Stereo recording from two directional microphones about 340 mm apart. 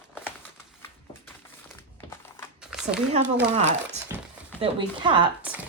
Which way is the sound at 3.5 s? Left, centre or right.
Centre.